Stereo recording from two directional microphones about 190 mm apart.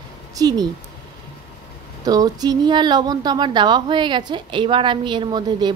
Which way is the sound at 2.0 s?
20° right (ahead or behind).